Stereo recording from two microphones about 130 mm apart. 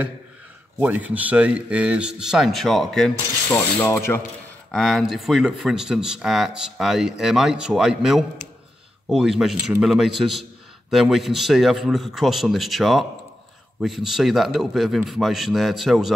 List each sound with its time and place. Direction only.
0.7 s speech: 10° right (ahead or behind)
3.4 s rub: 20° left (ahead or behind)
4.6 s speech: 5° left (ahead or behind)